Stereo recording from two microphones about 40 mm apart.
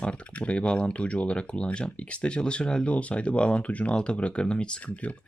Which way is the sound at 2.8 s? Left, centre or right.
Left.